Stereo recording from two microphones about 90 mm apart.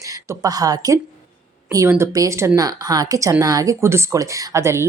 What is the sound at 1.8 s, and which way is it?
Speech, 30° right (ahead or behind).